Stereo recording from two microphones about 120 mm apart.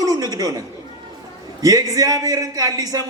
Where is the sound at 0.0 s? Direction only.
35° right (ahead or behind).